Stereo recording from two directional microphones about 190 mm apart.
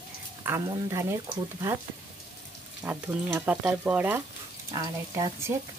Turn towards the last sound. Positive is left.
turn(degrees=-15)  # may be behind; listen again after turning